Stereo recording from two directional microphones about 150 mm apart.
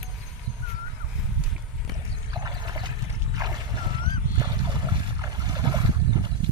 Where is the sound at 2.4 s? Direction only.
30° right (ahead or behind).